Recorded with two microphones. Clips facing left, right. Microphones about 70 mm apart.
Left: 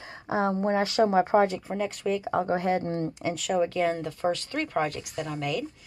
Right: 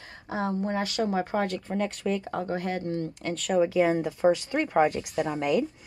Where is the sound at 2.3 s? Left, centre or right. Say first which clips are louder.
Left 5 dB; left.